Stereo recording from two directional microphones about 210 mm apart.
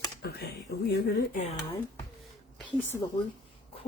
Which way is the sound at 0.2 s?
50° left (ahead or behind).